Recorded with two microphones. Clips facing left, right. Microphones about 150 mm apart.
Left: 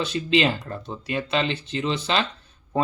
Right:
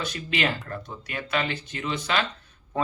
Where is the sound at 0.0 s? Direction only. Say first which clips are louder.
Left 6 dB; 25° left (ahead or behind).